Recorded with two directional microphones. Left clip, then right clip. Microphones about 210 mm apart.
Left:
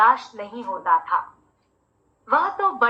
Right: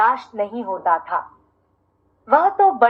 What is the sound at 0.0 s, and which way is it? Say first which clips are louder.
A woman's voice: even; 15° right (ahead or behind).